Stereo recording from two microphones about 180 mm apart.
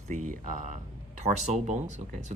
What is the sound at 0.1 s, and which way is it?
Speech, 45° right (ahead or behind).